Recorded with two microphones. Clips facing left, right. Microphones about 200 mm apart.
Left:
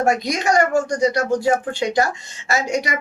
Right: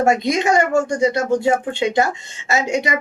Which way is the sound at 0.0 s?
25° right (ahead or behind).